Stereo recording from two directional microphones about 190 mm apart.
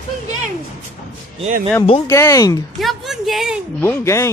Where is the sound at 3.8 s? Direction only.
15° left (ahead or behind).